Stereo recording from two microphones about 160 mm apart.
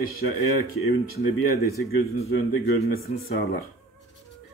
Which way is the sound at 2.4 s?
65° left (ahead or behind).